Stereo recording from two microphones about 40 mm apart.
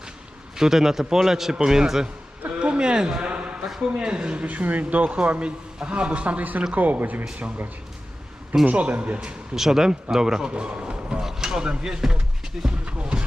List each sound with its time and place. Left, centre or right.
0.5 s a man's voice: centre
2.5 s a sound: right
3.9 s speech: right
4.4 s speech: right
8.6 s speech: right
9.6 s a man's voice: centre
10.5 s speech: right
11.2 s a man's voice: centre
12.6 s speech: right